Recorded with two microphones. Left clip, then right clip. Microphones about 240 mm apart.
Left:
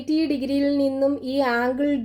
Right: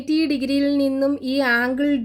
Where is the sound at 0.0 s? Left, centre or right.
Right.